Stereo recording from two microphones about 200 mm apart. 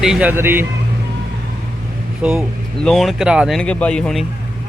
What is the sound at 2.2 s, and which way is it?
Speech, 5° right (ahead or behind).